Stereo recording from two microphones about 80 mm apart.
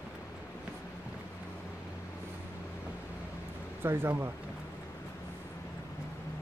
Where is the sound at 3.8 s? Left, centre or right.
Right.